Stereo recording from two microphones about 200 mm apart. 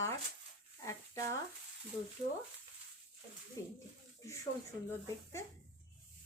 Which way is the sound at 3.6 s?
15° left (ahead or behind).